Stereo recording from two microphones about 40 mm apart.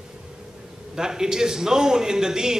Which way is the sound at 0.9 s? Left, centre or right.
Centre.